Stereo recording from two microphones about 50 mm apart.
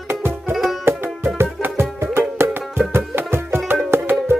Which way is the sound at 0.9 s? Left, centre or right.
Right.